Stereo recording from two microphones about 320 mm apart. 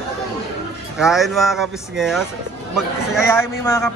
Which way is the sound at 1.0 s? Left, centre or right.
Centre.